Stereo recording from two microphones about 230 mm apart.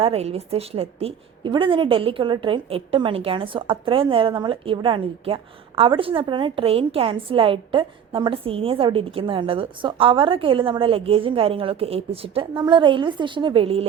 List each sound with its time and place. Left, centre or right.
0.0 s a woman's voice: right